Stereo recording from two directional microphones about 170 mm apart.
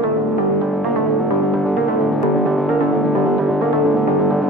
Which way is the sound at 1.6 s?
Centre (ahead or behind).